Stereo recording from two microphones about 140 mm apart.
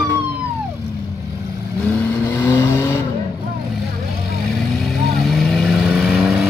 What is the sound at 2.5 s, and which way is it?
Vehicle, 20° left (ahead or behind).